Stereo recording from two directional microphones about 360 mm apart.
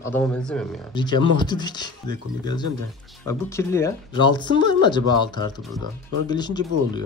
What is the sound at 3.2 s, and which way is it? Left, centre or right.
Speech, centre.